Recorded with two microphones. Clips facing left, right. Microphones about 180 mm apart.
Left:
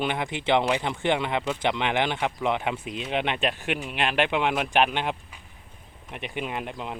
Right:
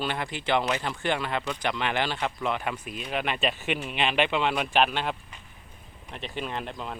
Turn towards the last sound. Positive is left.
turn(degrees=10)  # may be behind; listen again after turning